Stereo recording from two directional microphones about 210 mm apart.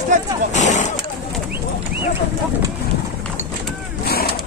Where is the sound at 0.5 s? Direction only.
35° left (ahead or behind).